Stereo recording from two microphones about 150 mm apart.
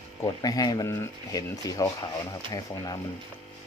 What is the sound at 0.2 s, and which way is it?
Speech, 25° left (ahead or behind).